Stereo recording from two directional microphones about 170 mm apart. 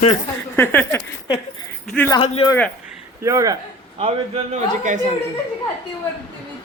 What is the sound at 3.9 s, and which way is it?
Speech, 35° right (ahead or behind).